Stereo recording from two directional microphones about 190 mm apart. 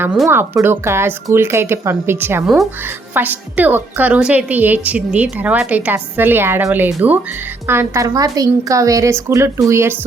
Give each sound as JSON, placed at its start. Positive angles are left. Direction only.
{"t": 0.0, "sound": "a woman's voice", "side_deg": -10}